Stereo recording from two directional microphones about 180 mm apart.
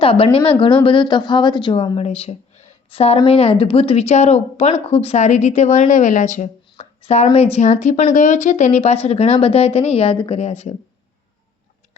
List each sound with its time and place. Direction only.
0.0 s a woman's voice: 30° left (ahead or behind)